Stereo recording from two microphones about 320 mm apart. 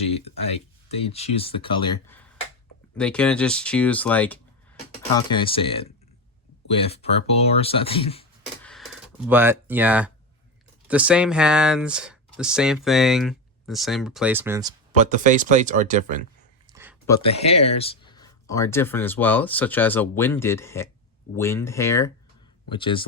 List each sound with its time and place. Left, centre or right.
0.9 s speech: centre
8.6 s a sound: centre
10.8 s speech: centre
14.9 s speech: right
16.7 s a sound: centre
17.1 s speech: centre